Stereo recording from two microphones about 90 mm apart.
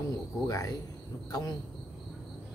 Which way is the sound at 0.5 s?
40° left (ahead or behind).